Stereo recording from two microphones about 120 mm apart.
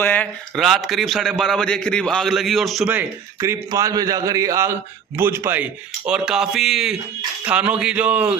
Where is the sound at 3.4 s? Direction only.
20° right (ahead or behind).